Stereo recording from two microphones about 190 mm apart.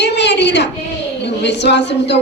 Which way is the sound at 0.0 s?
65° left (ahead or behind).